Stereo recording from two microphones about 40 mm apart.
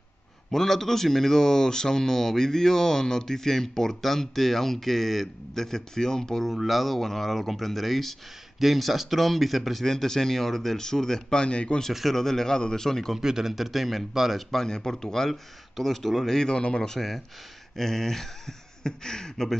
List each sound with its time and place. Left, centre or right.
0.5 s speech: centre
6.5 s speech: centre
11.4 s speech: left
11.9 s speech: centre
12.2 s speech: centre
13.1 s speech: centre
14.5 s speech: centre
16.3 s speech: centre